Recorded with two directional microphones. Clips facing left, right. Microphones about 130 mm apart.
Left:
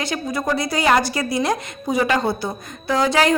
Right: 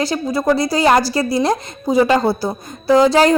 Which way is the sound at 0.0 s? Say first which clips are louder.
Right 6 dB; 35° right (ahead or behind).